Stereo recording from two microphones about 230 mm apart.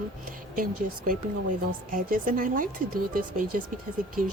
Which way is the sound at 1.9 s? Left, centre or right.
Right.